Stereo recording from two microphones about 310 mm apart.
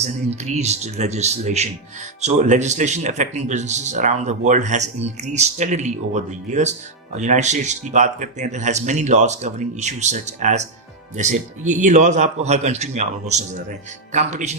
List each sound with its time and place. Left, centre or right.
0.0 s speech: right